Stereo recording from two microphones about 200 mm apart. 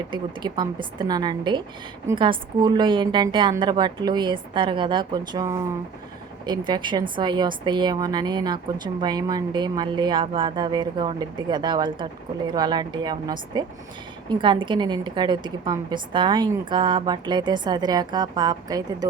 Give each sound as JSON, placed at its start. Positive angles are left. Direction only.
{"t": 0.1, "sound": "a woman's voice", "side_deg": -20}